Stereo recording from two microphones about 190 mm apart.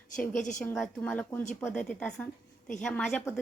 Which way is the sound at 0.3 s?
40° left (ahead or behind).